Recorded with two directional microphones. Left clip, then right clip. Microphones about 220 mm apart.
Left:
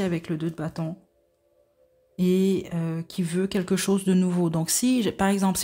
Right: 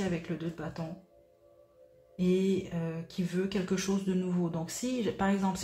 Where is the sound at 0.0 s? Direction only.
50° left (ahead or behind).